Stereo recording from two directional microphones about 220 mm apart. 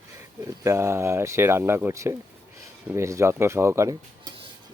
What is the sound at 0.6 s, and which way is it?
Speech, 15° right (ahead or behind).